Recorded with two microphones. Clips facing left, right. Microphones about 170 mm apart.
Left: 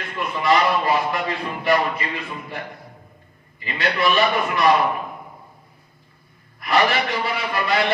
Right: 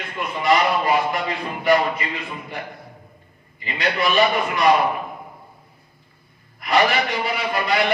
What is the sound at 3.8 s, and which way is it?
Speech, 20° right (ahead or behind).